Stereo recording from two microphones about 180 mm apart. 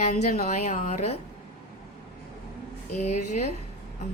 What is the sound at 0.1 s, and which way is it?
A woman's voice, 40° left (ahead or behind).